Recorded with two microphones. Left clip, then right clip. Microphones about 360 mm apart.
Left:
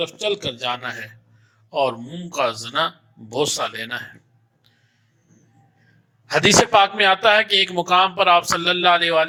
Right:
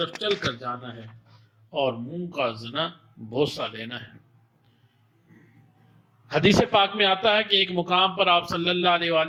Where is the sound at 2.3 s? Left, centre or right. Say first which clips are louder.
Left 6 dB; left.